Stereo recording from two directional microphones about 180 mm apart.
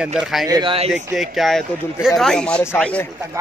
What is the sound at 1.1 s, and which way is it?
A man's voice, centre (ahead or behind).